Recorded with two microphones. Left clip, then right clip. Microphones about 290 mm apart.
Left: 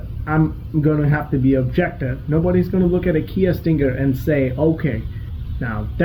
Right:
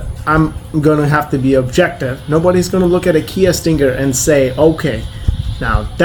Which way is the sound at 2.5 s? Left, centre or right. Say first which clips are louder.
Right 7 dB; right.